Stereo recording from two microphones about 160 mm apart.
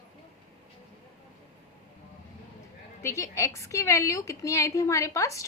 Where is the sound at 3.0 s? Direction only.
20° left (ahead or behind).